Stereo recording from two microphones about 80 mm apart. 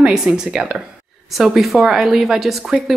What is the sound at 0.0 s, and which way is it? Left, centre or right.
Speech, centre.